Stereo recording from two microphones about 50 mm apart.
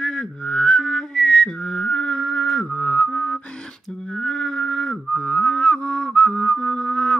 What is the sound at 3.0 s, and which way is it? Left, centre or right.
Music, left.